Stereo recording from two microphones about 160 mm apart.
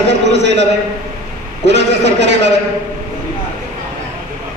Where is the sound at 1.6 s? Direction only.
90° right.